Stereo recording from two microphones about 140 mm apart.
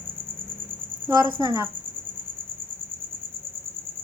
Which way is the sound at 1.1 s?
25° right (ahead or behind).